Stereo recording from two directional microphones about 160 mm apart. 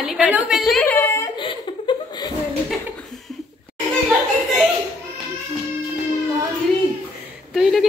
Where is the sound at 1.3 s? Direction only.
30° left (ahead or behind).